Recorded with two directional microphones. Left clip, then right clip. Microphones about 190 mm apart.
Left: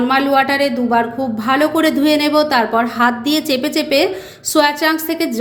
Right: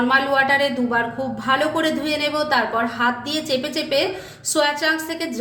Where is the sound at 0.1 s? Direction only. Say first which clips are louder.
Left 3 dB; 35° left (ahead or behind).